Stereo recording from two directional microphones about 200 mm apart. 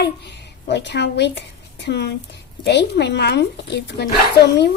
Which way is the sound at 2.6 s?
60° left (ahead or behind).